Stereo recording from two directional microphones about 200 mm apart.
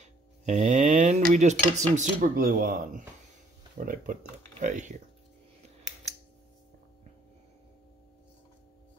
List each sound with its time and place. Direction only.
0.0 s speech: 35° right (ahead or behind)